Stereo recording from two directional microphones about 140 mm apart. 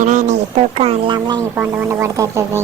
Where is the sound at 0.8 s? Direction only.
40° right (ahead or behind).